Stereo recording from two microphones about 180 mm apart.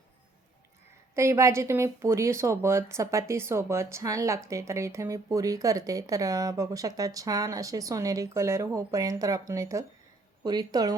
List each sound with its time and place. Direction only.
1.1 s speech: 15° right (ahead or behind)